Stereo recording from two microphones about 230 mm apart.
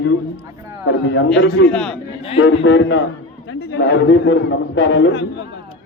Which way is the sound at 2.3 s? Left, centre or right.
Left.